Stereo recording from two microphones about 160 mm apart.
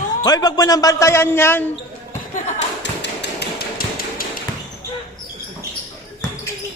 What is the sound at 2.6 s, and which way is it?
Tap, 90° left.